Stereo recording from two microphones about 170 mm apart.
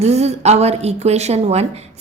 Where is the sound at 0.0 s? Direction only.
40° right (ahead or behind).